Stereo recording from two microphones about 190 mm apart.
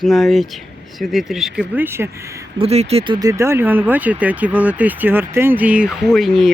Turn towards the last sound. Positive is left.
turn(degrees=0)  # may be behind; listen again after turning